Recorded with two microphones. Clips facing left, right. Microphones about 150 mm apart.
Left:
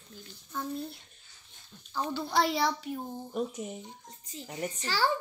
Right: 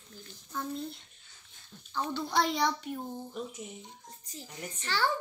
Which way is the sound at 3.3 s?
45° left (ahead or behind).